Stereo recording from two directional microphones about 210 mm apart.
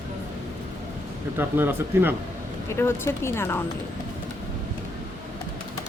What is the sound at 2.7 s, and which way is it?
Speech, 10° left (ahead or behind).